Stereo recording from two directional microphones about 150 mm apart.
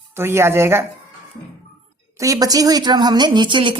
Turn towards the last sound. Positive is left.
turn(degrees=-30)  # may be behind; listen again after turning